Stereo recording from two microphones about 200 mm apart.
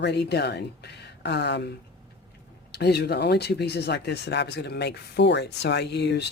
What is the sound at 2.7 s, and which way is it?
Speech, 55° left (ahead or behind).